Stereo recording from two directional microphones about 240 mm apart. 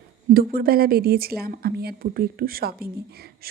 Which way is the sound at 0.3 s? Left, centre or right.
Right.